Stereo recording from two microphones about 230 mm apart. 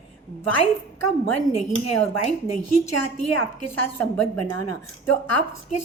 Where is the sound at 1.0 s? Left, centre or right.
Left.